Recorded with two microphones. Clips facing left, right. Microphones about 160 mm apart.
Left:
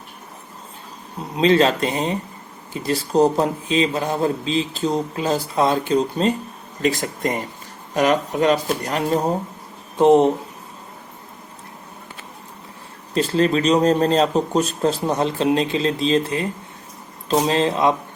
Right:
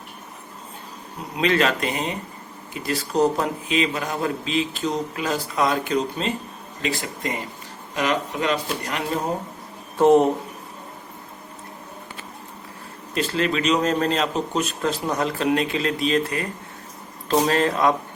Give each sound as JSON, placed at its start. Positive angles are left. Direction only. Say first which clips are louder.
{"t": 1.4, "sound": "speech", "louder": "left 5 dB", "side_deg": 30}
{"t": 10.0, "sound": "speech", "louder": "left 2 dB", "side_deg": 20}
{"t": 13.1, "sound": "speech", "louder": "left 5 dB", "side_deg": 35}